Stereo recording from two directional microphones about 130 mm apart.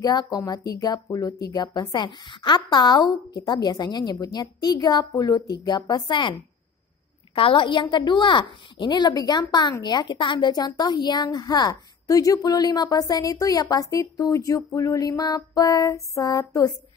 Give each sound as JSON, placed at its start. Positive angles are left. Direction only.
{"t": 0.0, "sound": "a woman's voice", "side_deg": 30}
{"t": 7.3, "sound": "a woman's voice", "side_deg": 40}